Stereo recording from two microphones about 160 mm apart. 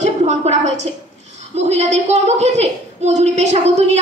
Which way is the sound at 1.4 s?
45° right (ahead or behind).